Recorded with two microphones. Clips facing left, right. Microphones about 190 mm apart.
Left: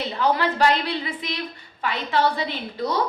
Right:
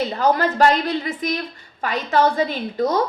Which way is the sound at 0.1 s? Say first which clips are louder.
Right 3 dB; 45° right (ahead or behind).